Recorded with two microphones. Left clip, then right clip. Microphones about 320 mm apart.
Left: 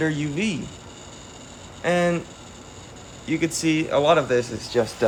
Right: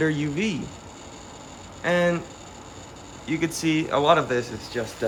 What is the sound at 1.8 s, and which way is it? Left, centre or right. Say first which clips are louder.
Speech: left 1 dB; centre.